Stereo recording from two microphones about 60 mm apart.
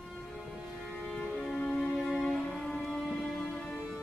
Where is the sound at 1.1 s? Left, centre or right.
Centre.